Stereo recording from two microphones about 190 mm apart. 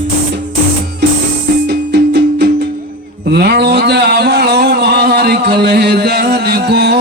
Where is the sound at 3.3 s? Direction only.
60° right (ahead or behind).